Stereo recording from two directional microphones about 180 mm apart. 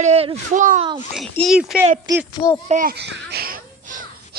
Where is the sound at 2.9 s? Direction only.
65° right (ahead or behind); by 4.4 s 50° right (ahead or behind).